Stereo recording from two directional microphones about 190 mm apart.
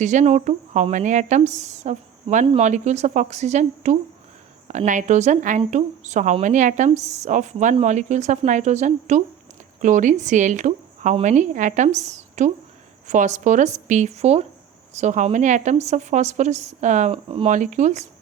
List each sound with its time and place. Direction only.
0.0 s speech: 40° right (ahead or behind)